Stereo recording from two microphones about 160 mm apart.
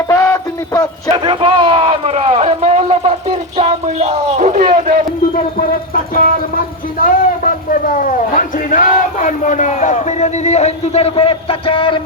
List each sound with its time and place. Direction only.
0.1 s music: 20° left (ahead or behind)
1.1 s speech: 35° right (ahead or behind)
3.6 s a sound: 45° right (ahead or behind)
5.5 s speech: 65° left (ahead or behind); by 11.9 s 35° left (ahead or behind)